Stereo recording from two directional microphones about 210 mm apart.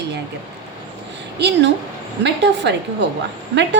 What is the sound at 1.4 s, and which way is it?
A woman's voice, 55° right (ahead or behind).